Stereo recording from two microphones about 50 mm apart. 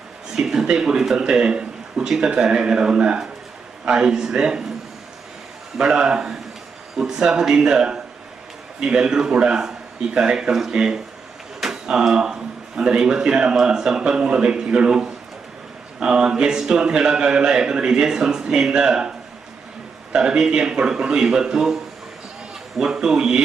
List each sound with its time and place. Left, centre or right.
0.3 s a man's voice: centre
5.7 s a man's voice: centre
20.1 s a man's voice: centre
22.8 s a man's voice: centre